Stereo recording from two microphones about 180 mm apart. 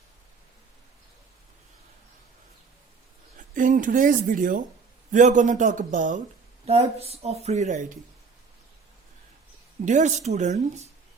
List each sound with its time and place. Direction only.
3.3 s a man's voice: 45° right (ahead or behind)
9.8 s speech: 40° right (ahead or behind)